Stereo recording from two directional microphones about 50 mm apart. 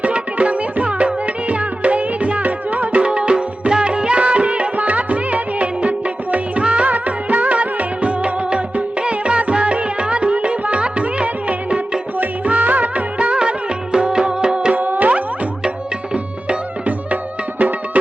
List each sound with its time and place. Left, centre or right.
0.0 s music: right
3.0 s music: centre
6.3 s music of bollywood: right
14.8 s music: right